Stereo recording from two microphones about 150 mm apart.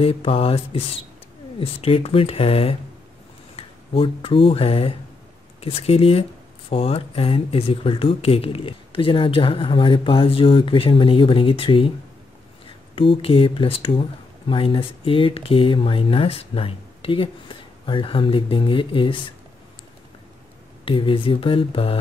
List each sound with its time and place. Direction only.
0.0 s speech: 40° left (ahead or behind)
12.9 s speech: 35° left (ahead or behind)
20.8 s speech: 35° left (ahead or behind)